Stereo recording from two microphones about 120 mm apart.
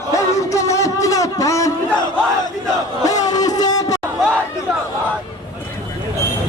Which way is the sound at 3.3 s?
30° left (ahead or behind).